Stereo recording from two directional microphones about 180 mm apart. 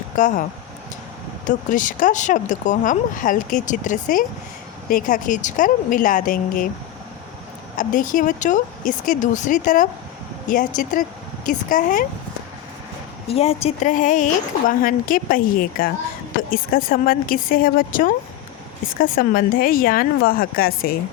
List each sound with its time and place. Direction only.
0.2 s speech: 45° left (ahead or behind)
1.5 s speech: 45° left (ahead or behind)
7.8 s speech: 45° left (ahead or behind)
11.4 s speech: 45° left (ahead or behind)
13.2 s speech: 35° left (ahead or behind); by 20.9 s 55° left (ahead or behind)